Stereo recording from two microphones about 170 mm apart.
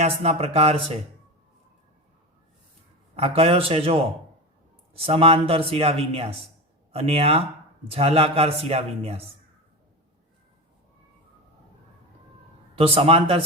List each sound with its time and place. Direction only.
0.0 s a man's voice: 40° right (ahead or behind)
3.2 s a man's voice: 35° right (ahead or behind)
12.7 s a man's voice: 35° right (ahead or behind)